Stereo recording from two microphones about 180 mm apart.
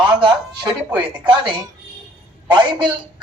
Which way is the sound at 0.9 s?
10° right (ahead or behind).